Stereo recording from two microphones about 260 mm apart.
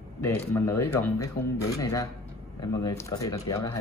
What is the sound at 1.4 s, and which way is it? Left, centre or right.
Speech, left.